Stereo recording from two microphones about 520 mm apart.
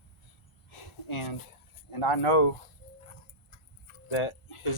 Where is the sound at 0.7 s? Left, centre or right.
Left.